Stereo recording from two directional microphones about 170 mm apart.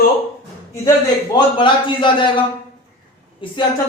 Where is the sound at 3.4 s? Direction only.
30° left (ahead or behind).